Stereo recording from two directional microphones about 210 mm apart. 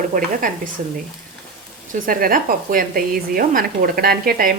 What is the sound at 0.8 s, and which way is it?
Speech, 40° right (ahead or behind).